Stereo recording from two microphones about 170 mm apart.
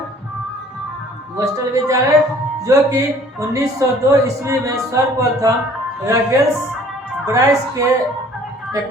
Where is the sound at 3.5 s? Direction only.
20° right (ahead or behind).